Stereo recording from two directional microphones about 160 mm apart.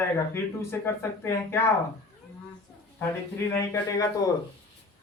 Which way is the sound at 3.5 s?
20° left (ahead or behind).